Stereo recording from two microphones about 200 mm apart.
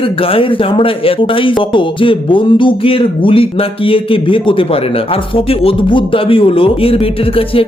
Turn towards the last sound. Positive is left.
turn(degrees=30)  # may be behind; listen again after turning